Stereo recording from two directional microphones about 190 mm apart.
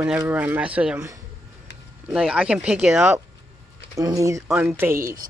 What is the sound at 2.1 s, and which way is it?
Speech, 5° right (ahead or behind).